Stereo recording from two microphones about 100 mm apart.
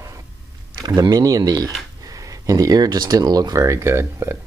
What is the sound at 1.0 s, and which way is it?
Speech, 40° right (ahead or behind).